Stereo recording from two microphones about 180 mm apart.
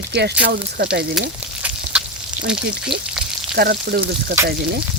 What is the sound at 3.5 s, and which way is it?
Speech, 60° right (ahead or behind).